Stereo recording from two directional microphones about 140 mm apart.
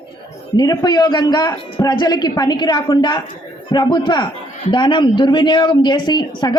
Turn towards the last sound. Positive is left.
turn(degrees=30)  # may be behind; listen again after turning